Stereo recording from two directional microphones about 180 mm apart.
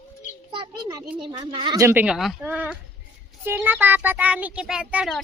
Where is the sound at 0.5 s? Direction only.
20° right (ahead or behind).